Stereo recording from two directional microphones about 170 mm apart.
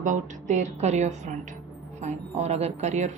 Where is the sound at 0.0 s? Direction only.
45° right (ahead or behind).